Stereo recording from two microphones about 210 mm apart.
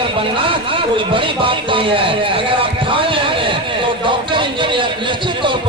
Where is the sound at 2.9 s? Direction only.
25° right (ahead or behind).